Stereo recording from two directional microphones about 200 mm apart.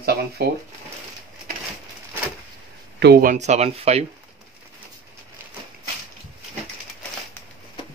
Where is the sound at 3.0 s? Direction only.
50° right (ahead or behind); by 4.1 s 30° right (ahead or behind).